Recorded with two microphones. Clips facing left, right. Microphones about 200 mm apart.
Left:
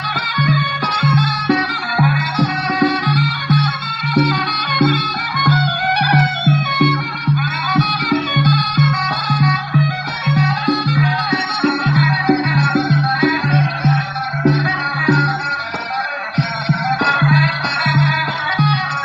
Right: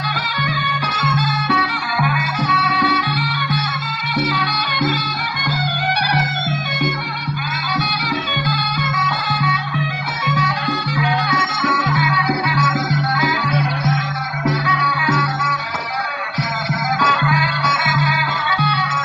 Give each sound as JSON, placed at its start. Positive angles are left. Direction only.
{"t": 0.3, "sound": "music", "side_deg": 45}
{"t": 7.7, "sound": "music", "side_deg": 45}
{"t": 15.0, "sound": "music", "side_deg": 35}
{"t": 16.6, "sound": "music", "side_deg": 35}